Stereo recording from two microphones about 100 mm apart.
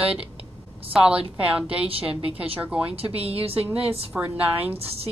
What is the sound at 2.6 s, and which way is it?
Speech, 10° right (ahead or behind).